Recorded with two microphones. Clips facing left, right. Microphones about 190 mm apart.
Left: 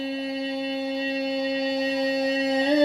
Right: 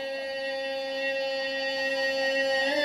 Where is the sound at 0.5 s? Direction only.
65° left (ahead or behind).